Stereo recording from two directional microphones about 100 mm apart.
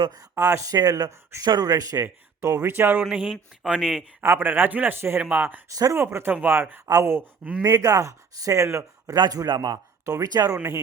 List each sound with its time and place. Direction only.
0.0 s speech: 40° right (ahead or behind)
0.8 s speech: 40° right (ahead or behind); by 3.0 s 20° right (ahead or behind)
3.0 s speech: 10° right (ahead or behind)
4.2 s a man's voice: 20° right (ahead or behind)
5.6 s a man's voice: 35° right (ahead or behind)
9.1 s speech: 40° right (ahead or behind)